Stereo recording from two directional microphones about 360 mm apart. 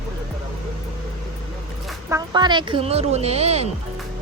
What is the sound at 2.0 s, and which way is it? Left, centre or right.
Speech, centre.